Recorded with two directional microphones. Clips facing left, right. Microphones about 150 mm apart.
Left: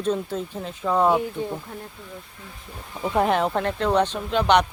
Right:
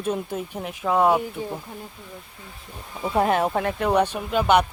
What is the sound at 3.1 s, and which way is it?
Speech, 5° right (ahead or behind).